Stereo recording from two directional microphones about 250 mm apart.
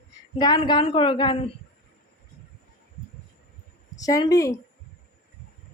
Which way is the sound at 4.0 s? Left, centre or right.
Centre.